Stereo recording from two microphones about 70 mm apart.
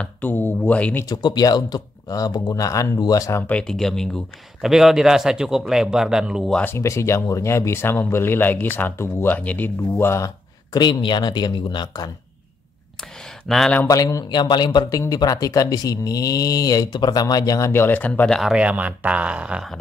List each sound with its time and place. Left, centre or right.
0.0 s speech: left
1.0 s speech: left
2.6 s speech: left
3.4 s speech: centre
4.6 s speech: centre
6.8 s speech: left
9.9 s speech: left
10.2 s speech: left
13.5 s speech: centre
13.8 s speech: left
14.3 s speech: left
15.3 s speech: left
17.6 s speech: left
18.5 s speech: centre